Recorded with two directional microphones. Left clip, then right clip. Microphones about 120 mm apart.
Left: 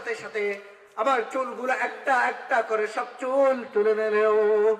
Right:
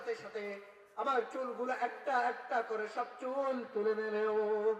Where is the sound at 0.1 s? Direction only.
30° left (ahead or behind).